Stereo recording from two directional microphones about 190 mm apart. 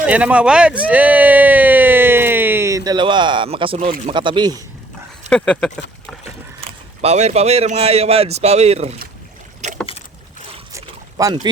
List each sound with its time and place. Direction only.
0.0 s speech: 5° right (ahead or behind); by 3.8 s 30° right (ahead or behind)
3.8 s speech: 40° right (ahead or behind)
4.1 s speech: 25° right (ahead or behind)
5.3 s speech: 5° left (ahead or behind)
6.6 s speech: 35° right (ahead or behind)
10.7 s boat: 15° right (ahead or behind)